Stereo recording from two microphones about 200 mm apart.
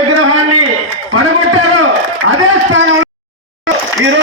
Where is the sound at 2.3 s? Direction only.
80° right.